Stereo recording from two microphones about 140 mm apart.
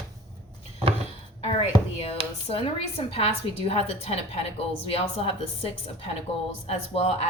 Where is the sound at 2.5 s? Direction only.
45° left (ahead or behind).